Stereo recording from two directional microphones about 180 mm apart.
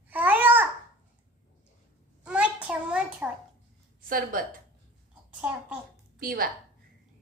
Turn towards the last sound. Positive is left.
turn(degrees=-55)  # may be behind; listen again after turning